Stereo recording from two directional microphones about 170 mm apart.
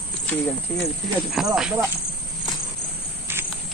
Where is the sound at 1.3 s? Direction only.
5° right (ahead or behind).